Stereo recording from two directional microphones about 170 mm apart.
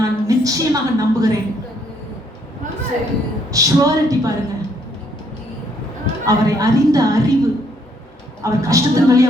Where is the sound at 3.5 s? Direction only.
20° right (ahead or behind).